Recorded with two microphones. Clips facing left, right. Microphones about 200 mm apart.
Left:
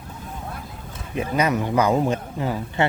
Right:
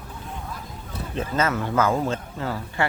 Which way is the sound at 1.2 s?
15° left (ahead or behind).